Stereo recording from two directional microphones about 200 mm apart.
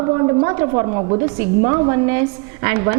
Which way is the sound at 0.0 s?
20° right (ahead or behind).